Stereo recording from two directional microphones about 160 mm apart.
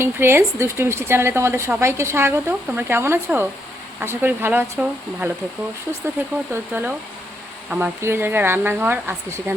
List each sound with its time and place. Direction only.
0.0 s speech: 15° right (ahead or behind)